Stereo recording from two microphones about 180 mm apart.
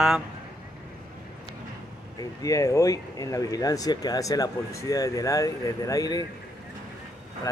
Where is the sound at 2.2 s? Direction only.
20° left (ahead or behind).